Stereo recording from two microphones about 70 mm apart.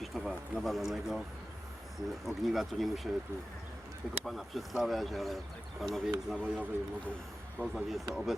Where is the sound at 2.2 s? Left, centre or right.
Centre.